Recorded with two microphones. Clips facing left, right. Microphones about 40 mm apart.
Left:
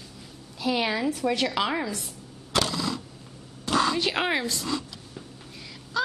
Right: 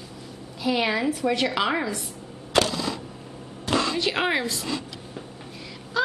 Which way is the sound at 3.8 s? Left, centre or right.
Centre.